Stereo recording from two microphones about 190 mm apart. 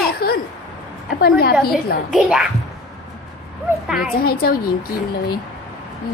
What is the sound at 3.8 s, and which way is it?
Speech, centre (ahead or behind).